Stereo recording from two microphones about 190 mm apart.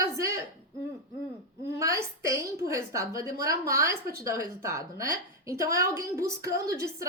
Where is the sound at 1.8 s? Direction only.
15° right (ahead or behind).